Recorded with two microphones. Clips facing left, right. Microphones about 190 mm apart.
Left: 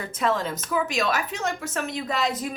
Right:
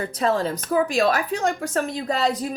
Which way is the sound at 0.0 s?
35° right (ahead or behind).